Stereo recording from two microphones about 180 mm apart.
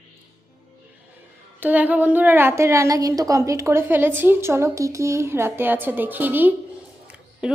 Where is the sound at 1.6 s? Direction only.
10° right (ahead or behind).